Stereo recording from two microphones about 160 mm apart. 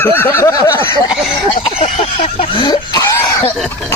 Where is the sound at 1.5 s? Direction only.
40° left (ahead or behind); by 3.4 s 20° left (ahead or behind).